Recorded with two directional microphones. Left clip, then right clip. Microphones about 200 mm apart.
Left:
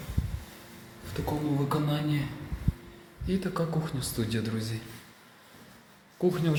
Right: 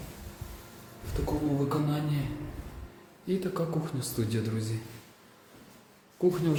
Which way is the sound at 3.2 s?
10° right (ahead or behind).